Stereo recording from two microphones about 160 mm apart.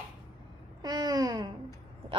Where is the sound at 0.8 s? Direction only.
25° right (ahead or behind).